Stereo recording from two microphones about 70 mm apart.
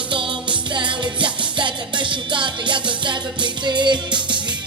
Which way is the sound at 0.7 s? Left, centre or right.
Right.